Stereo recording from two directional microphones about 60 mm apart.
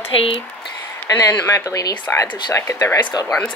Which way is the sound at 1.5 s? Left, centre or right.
Left.